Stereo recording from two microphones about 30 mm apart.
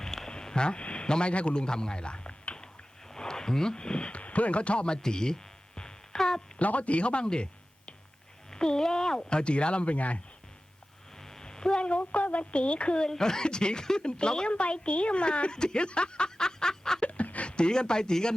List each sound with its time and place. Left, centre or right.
0.0 s a sound: centre
0.3 s a sound: left
1.3 s speech: left
1.5 s speech: left
3.1 s speech: left
4.2 s speech: left
5.0 s a sound: left
6.6 s speech: left
8.4 s speech: left
11.2 s speech: centre; by 13.1 s left
13.1 s speech: centre
14.5 s a woman's voice: left
17.0 s a sound: left
17.4 s speech: left